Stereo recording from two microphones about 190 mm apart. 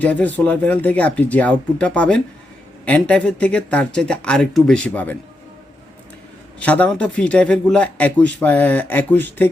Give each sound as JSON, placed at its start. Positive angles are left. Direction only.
{"t": 0.0, "sound": "a man's voice", "side_deg": 10}
{"t": 6.6, "sound": "a man's voice", "side_deg": 5}